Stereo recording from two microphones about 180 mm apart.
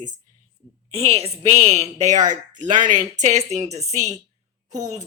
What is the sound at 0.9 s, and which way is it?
A woman's voice, 35° right (ahead or behind).